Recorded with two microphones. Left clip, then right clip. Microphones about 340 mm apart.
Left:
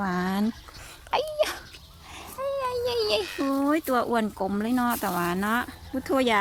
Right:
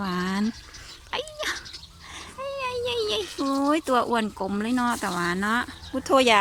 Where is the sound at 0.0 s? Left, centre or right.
Centre.